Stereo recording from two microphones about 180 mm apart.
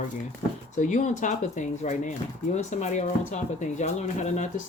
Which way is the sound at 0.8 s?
45° left (ahead or behind).